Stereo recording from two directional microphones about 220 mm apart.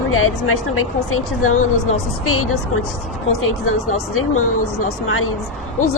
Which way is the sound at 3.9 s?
75° left (ahead or behind).